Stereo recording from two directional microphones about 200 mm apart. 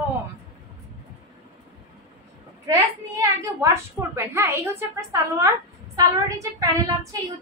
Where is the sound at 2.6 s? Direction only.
15° right (ahead or behind).